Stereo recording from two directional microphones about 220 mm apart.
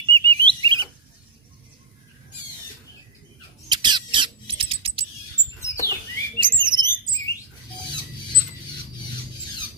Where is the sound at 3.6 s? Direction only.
20° right (ahead or behind).